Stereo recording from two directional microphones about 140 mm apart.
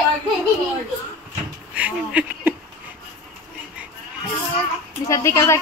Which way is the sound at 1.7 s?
10° right (ahead or behind).